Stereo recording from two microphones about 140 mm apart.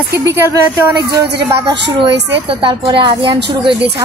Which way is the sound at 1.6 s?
35° right (ahead or behind).